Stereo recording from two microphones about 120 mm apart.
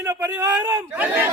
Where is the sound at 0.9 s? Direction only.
15° right (ahead or behind).